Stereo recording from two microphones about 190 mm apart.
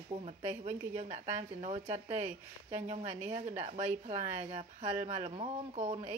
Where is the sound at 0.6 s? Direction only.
35° right (ahead or behind).